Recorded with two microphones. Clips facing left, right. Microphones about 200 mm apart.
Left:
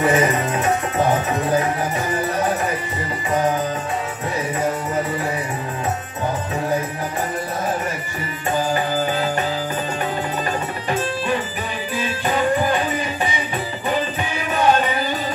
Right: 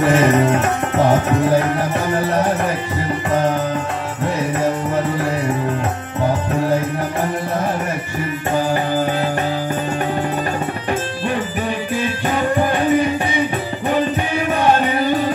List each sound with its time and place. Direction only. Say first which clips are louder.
0.1 s music: right 5 dB; 65° right (ahead or behind)
12.7 s music: right 7 dB; 60° right (ahead or behind)